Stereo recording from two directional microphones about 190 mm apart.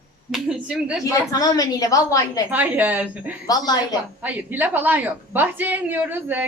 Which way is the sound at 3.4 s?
20° left (ahead or behind).